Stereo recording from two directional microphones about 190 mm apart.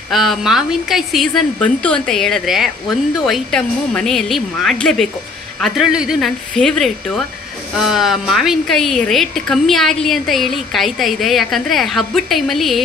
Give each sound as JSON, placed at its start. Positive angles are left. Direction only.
{"t": 0.1, "sound": "speech", "side_deg": 0}